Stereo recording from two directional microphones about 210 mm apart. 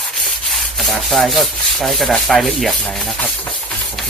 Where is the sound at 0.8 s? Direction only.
Centre (ahead or behind).